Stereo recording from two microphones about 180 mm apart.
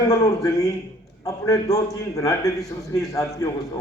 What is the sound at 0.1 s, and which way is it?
A man's voice, 20° left (ahead or behind).